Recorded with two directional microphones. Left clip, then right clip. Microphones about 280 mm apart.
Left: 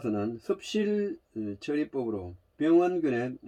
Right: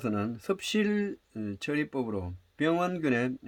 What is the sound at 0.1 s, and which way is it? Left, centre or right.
Speech, right.